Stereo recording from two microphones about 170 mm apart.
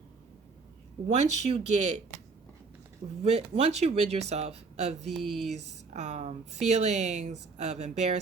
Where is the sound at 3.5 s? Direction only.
35° right (ahead or behind).